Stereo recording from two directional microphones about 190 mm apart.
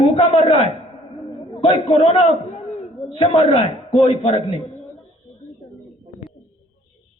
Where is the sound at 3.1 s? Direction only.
30° left (ahead or behind).